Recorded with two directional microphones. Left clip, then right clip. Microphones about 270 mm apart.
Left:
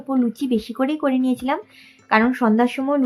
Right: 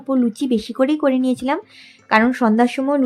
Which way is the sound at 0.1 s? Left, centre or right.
Right.